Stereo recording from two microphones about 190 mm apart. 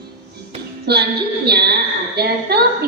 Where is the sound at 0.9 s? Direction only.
60° right (ahead or behind).